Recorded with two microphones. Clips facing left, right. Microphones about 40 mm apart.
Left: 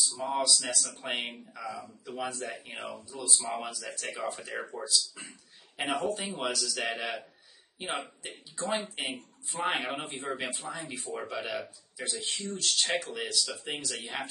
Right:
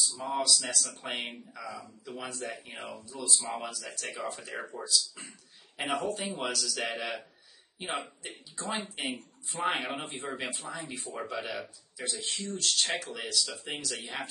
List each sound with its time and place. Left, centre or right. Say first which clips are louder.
0.1 s speech: left 2 dB; left
0.4 s speech: right 1 dB; centre